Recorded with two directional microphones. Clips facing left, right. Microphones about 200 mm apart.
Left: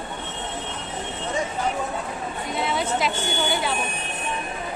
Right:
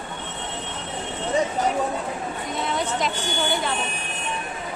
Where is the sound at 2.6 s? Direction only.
5° left (ahead or behind).